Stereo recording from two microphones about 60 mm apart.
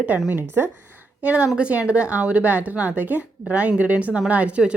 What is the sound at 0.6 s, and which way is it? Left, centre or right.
Speech, right.